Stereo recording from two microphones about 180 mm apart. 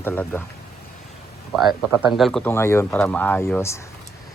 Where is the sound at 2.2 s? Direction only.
Centre (ahead or behind).